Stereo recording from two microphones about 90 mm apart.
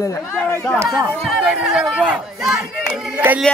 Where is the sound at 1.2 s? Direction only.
Centre (ahead or behind).